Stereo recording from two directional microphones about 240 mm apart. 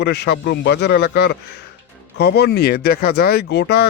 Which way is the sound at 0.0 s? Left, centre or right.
Left.